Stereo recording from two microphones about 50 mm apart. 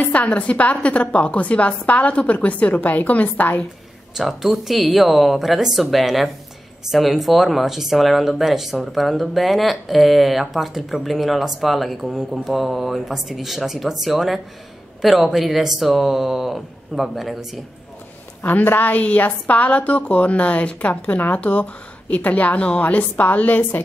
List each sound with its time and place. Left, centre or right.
0.0 s a woman's voice: left
4.1 s speech: centre
18.4 s a woman's voice: left